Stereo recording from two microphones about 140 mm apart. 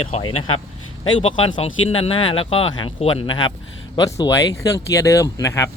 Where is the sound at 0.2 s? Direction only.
45° left (ahead or behind).